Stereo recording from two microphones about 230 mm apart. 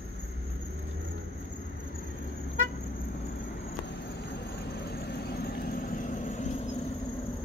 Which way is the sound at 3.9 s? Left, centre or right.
Left.